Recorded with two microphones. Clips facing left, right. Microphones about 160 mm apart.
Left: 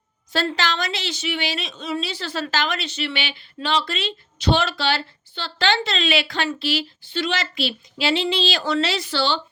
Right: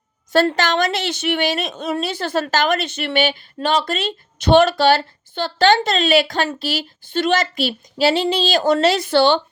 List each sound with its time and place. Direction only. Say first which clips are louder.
0.3 s a woman's voice: right 7 dB; 45° right (ahead or behind)